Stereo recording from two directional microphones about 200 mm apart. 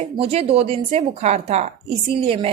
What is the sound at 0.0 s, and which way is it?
A woman's voice, 30° right (ahead or behind).